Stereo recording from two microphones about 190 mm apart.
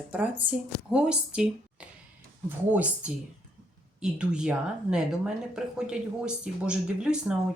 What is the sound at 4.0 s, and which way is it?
Speech, 5° right (ahead or behind).